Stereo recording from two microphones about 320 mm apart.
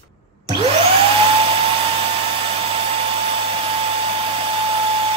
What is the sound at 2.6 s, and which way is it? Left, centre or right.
Hair dryer, centre.